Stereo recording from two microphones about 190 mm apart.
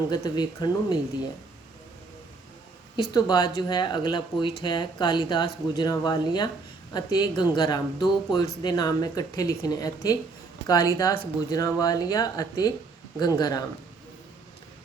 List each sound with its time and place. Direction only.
0.1 s speech: 20° left (ahead or behind)
2.9 s speech: 20° left (ahead or behind)